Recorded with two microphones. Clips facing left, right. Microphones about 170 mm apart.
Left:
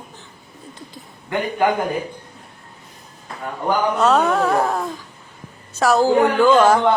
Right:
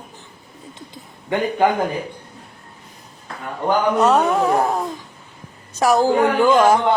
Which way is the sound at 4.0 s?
10° right (ahead or behind).